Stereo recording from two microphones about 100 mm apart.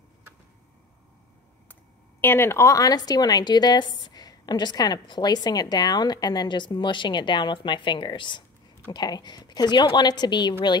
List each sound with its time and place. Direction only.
2.2 s speech: 25° left (ahead or behind); by 10.5 s 45° left (ahead or behind)